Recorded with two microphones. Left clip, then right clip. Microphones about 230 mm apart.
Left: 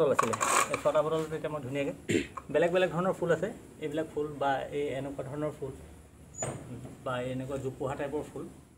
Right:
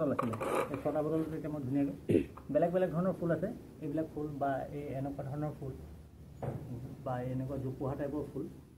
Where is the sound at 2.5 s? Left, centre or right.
Left.